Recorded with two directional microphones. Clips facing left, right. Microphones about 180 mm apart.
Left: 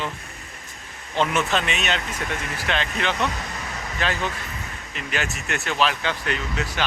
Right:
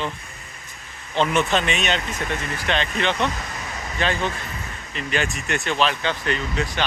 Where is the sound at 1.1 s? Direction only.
5° left (ahead or behind).